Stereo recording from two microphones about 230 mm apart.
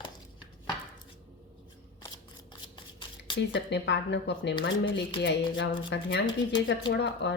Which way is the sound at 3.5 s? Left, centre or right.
Left.